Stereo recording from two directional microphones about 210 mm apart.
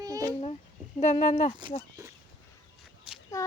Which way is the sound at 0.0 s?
15° right (ahead or behind).